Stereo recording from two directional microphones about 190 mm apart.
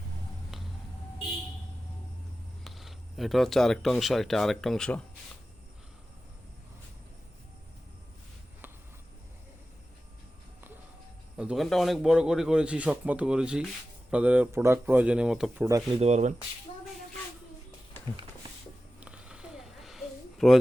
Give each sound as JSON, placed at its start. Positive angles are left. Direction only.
{"t": 2.6, "sound": "speech", "side_deg": 0}
{"t": 11.3, "sound": "a man's voice", "side_deg": 0}
{"t": 15.6, "sound": "speech", "side_deg": -20}
{"t": 16.0, "sound": "speech", "side_deg": -35}
{"t": 18.9, "sound": "a sound", "side_deg": -5}